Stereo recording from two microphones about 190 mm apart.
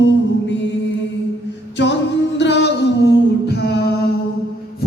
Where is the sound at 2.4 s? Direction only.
65° left (ahead or behind).